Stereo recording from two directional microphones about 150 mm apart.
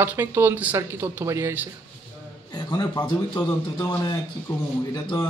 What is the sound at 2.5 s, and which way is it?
A man's voice, 25° left (ahead or behind).